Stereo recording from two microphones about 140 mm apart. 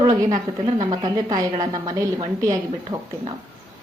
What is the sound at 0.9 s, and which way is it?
A woman's voice, 30° right (ahead or behind).